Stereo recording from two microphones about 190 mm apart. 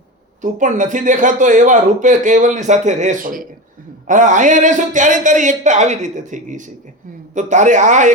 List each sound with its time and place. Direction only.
0.4 s speech: 40° right (ahead or behind)